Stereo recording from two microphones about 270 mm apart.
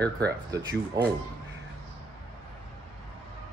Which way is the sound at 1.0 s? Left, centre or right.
Centre.